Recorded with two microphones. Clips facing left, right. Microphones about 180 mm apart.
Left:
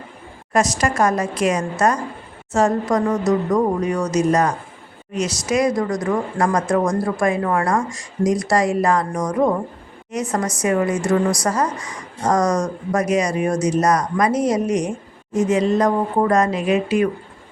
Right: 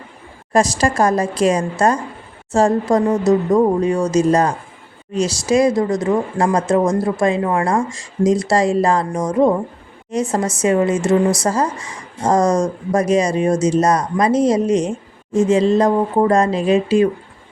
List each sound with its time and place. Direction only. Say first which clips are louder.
0.5 s a woman's voice: right 3 dB; 30° right (ahead or behind)